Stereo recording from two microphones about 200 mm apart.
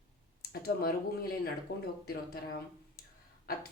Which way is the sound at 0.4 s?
50° left (ahead or behind).